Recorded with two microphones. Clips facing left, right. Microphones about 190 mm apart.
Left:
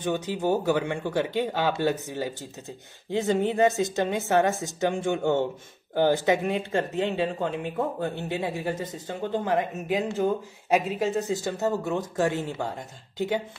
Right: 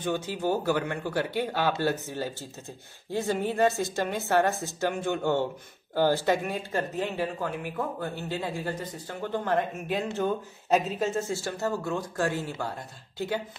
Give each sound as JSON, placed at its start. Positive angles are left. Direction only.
{"t": 0.0, "sound": "speech", "side_deg": 15}